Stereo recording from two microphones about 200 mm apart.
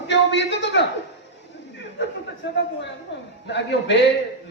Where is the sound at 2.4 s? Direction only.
65° left (ahead or behind).